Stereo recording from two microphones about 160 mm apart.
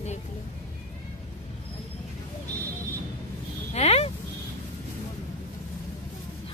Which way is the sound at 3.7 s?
45° left (ahead or behind).